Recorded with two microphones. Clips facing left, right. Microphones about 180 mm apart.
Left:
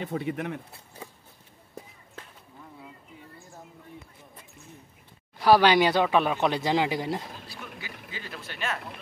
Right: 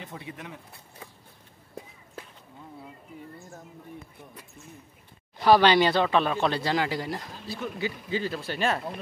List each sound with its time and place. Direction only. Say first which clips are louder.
0.0 s speech: left 10 dB; 65° left (ahead or behind)
5.4 s speech: even; 10° left (ahead or behind)
7.4 s speech: right 10 dB; 30° right (ahead or behind)